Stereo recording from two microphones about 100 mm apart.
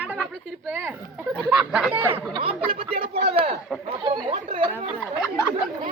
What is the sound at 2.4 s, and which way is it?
Speech, 70° right (ahead or behind).